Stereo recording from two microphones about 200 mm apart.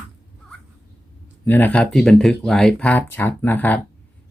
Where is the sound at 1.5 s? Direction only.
10° left (ahead or behind).